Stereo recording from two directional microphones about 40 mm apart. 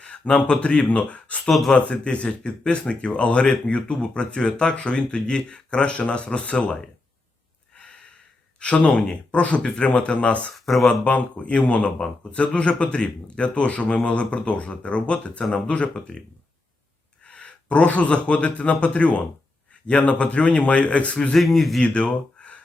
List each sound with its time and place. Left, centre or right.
0.3 s speech: left
0.5 s speech: left
7.8 s a sound: left
8.5 s speech: left
10.5 s speech: centre
10.8 s speech: left
17.2 s speech: left
21.3 s speech: centre
21.8 s speech: left